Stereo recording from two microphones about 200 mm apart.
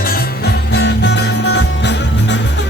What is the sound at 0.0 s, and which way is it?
Music, 50° left (ahead or behind).